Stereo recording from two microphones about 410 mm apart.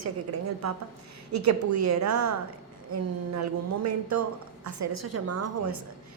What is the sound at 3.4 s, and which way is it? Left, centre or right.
A woman's voice, right.